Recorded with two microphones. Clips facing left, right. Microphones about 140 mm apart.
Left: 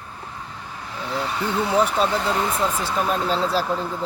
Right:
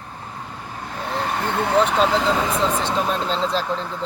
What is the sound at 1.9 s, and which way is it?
Speech, 90° right.